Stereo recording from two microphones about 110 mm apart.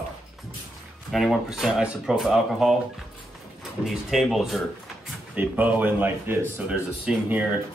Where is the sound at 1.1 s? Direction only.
Centre (ahead or behind).